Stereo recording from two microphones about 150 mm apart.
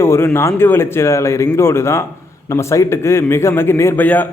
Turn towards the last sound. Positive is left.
turn(degrees=10)  # may be behind; listen again after turning